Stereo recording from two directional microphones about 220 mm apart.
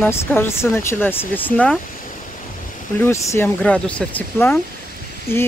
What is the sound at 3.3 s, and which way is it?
Speech, 10° left (ahead or behind).